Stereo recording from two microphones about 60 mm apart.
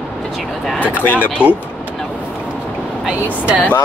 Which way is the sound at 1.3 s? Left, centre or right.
Centre.